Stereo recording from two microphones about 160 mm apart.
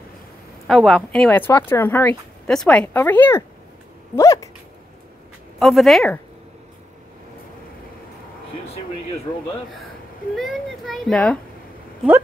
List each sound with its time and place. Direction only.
0.7 s speech: centre (ahead or behind)
4.1 s a sound: 20° left (ahead or behind)
5.6 s a child's voice: centre (ahead or behind)
10.3 s a child's voice: centre (ahead or behind)